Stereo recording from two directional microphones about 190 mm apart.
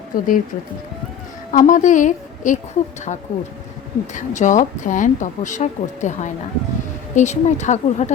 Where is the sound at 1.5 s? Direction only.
40° left (ahead or behind).